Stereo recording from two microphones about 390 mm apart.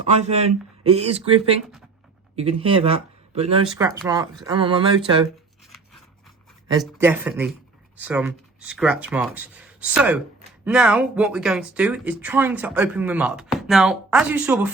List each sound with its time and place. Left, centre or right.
0.2 s speech: centre
6.7 s speech: centre